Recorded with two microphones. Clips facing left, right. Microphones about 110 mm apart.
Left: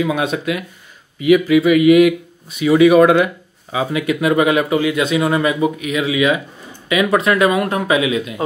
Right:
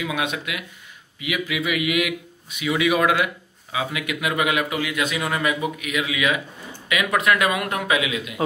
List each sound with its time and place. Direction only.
0.0 s a man's voice: 35° left (ahead or behind)